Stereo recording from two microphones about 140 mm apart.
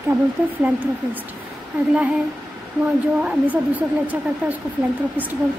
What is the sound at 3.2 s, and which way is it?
A woman's voice, 10° right (ahead or behind).